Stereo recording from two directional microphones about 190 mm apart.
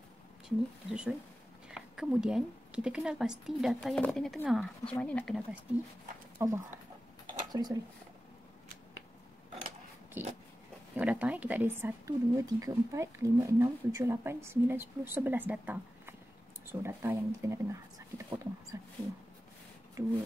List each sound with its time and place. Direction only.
0.8 s speech: 5° right (ahead or behind)
6.3 s speech: 15° right (ahead or behind)
7.2 s a sound: 20° right (ahead or behind)
10.2 s speech: 10° right (ahead or behind)